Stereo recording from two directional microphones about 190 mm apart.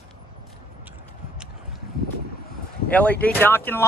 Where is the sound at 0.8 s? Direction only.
10° right (ahead or behind).